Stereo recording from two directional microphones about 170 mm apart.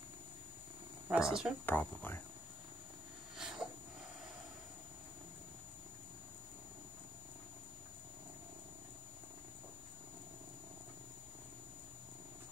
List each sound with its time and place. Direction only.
1.0 s speech: 5° right (ahead or behind)
1.7 s speech: 10° left (ahead or behind)
3.3 s a sound: 5° right (ahead or behind)